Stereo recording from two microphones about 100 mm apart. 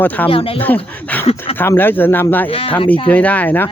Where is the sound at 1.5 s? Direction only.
20° left (ahead or behind).